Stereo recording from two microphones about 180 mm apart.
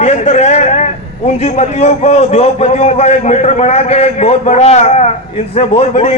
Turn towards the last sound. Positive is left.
turn(degrees=35)  # may be behind; listen again after turning